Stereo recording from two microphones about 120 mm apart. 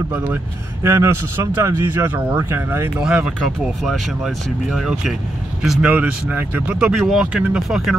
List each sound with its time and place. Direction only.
0.1 s speech: 10° right (ahead or behind)
0.8 s speech: 20° right (ahead or behind)
3.0 s speech: 5° right (ahead or behind)